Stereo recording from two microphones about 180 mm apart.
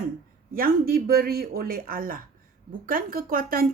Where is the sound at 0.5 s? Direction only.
55° right (ahead or behind).